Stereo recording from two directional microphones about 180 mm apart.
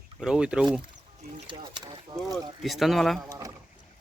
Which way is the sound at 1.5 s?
25° right (ahead or behind).